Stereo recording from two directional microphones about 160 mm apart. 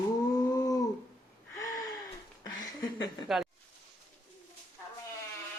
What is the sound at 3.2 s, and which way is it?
Speech, 5° right (ahead or behind).